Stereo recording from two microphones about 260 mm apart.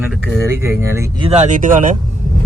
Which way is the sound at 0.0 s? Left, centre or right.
Centre.